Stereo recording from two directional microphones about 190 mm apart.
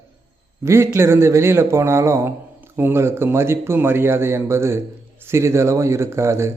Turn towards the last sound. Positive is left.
turn(degrees=-15)  # may be behind; listen again after turning